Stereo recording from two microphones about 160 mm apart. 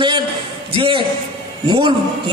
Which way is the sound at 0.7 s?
35° right (ahead or behind).